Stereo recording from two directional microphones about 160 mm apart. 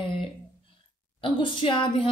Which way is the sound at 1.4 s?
30° left (ahead or behind).